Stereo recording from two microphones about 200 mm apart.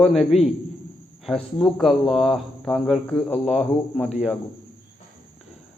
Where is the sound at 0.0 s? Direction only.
Centre (ahead or behind).